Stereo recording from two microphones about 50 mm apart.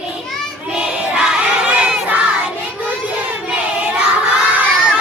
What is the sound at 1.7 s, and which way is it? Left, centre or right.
Crowd, right.